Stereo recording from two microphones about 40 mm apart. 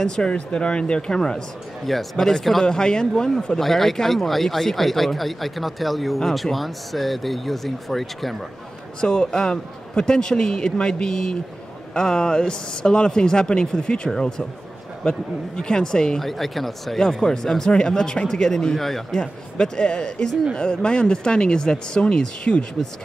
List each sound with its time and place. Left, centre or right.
0.0 s speech: left
1.9 s speech: centre
2.6 s speech: centre
9.0 s speech: centre
16.2 s speech: centre
17.0 s speech: centre
18.8 s speech: centre
19.1 s speech: left